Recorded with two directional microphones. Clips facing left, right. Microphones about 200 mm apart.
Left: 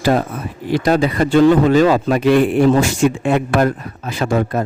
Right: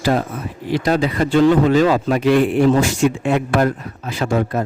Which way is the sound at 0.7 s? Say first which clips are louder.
Left 2 dB; 50° left (ahead or behind).